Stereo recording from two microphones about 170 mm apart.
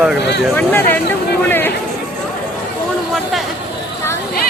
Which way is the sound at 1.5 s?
10° left (ahead or behind).